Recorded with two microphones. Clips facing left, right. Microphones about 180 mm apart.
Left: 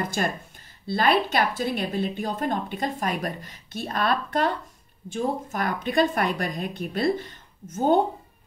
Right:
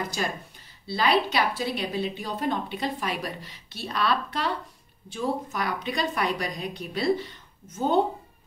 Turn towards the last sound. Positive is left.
turn(degrees=50)  # may be behind; listen again after turning